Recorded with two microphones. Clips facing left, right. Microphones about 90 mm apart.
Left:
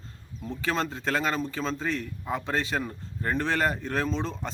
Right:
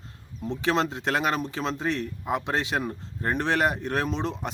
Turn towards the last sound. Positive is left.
turn(degrees=-20)  # may be behind; listen again after turning